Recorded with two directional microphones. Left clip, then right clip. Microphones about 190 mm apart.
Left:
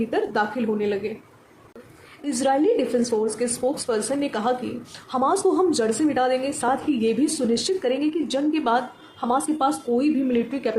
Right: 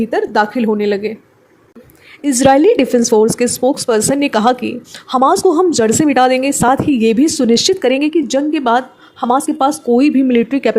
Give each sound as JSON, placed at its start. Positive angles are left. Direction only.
{"t": 0.0, "sound": "speech", "side_deg": -35}
{"t": 2.2, "sound": "speech", "side_deg": -40}